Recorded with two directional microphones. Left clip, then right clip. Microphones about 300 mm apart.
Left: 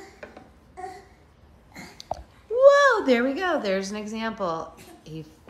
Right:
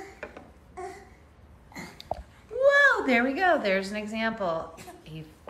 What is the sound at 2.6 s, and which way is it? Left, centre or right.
A woman's voice, centre.